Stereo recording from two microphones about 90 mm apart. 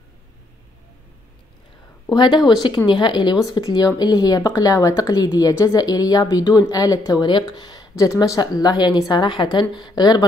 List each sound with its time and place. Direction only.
2.0 s a woman's voice: 60° left (ahead or behind)
7.9 s speech: 35° left (ahead or behind)
8.2 s a woman's voice: 50° left (ahead or behind)